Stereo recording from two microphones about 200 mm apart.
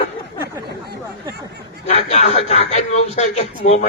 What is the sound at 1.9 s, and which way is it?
A man's voice, 30° left (ahead or behind).